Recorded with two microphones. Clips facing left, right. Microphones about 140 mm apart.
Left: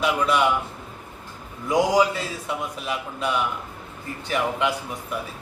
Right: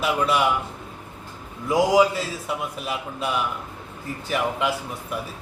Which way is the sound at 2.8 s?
5° right (ahead or behind).